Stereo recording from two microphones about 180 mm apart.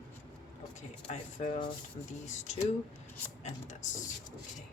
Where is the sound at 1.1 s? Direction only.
40° left (ahead or behind).